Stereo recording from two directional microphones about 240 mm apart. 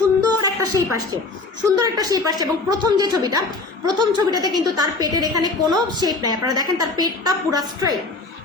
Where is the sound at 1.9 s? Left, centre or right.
Centre.